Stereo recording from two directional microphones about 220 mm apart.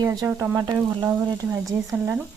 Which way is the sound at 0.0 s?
15° right (ahead or behind).